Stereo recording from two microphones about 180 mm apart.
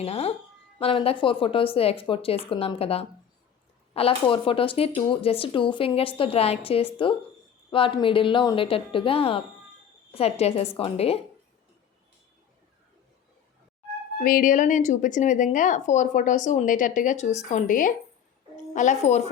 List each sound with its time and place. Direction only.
0.0 s a woman's voice: 35° left (ahead or behind)
14.2 s a woman's voice: 50° left (ahead or behind)